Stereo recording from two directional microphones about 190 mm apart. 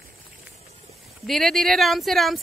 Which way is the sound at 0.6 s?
35° right (ahead or behind).